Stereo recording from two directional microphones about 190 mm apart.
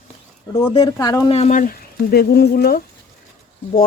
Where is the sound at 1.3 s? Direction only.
35° left (ahead or behind); by 2.7 s 55° left (ahead or behind).